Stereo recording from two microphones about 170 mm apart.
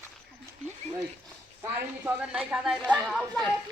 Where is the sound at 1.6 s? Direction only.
10° right (ahead or behind).